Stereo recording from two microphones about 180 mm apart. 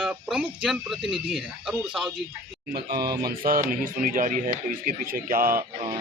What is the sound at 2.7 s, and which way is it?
Speech, 60° right (ahead or behind).